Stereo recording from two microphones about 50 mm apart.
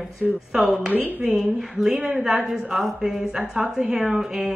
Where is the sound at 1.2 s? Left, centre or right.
Centre.